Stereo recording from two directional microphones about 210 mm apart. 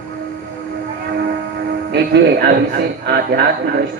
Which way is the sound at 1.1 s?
50° right (ahead or behind).